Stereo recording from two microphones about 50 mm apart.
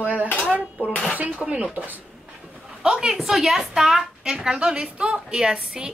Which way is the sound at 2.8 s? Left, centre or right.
Centre.